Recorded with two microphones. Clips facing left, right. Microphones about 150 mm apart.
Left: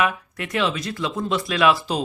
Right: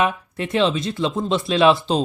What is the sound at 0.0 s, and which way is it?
Speech, 25° right (ahead or behind).